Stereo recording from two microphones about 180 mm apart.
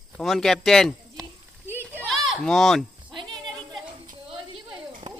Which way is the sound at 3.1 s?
25° right (ahead or behind).